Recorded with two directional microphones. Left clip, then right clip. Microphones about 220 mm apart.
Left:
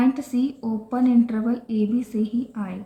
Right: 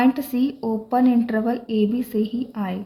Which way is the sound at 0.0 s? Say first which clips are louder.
Right 2 dB; 35° right (ahead or behind).